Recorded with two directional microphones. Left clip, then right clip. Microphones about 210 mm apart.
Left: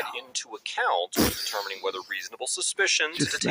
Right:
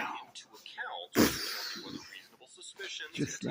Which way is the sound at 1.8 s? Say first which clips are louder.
Left 16 dB; 50° left (ahead or behind).